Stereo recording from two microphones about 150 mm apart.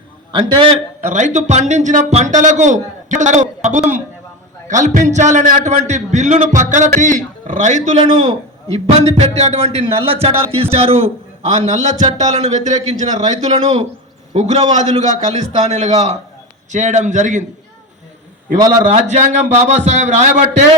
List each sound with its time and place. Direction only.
0.3 s a man's voice: 30° right (ahead or behind)
1.0 s a man's voice: 55° right (ahead or behind)
11.6 s a man's voice: 50° right (ahead or behind)
18.9 s a man's voice: 50° right (ahead or behind)